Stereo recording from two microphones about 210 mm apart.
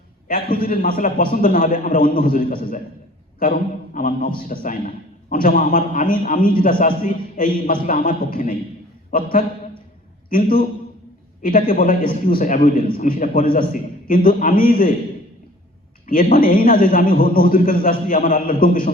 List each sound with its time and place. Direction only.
0.3 s a man's voice: 45° left (ahead or behind)
3.9 s a man's voice: 40° left (ahead or behind)
16.0 s a man's voice: 40° left (ahead or behind)